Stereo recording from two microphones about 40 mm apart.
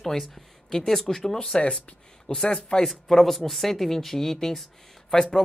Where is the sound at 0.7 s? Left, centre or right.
Centre.